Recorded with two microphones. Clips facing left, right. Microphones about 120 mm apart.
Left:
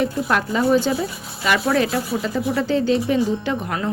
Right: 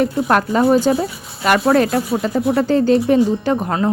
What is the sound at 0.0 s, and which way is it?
Speech, 45° right (ahead or behind).